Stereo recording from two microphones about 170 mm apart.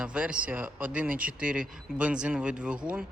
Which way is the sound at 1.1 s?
55° right (ahead or behind).